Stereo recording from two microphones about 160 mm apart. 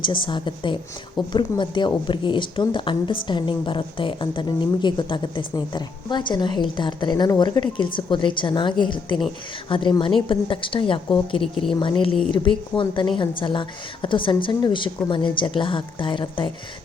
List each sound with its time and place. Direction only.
0.0 s a woman's voice: 30° left (ahead or behind)
11.3 s speech: 5° left (ahead or behind)
11.8 s a woman's voice: 30° left (ahead or behind)